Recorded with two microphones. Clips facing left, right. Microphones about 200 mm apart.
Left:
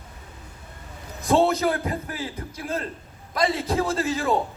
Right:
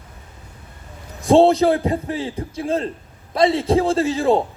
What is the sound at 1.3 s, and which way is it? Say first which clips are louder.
A man's voice: right 7 dB; 30° right (ahead or behind).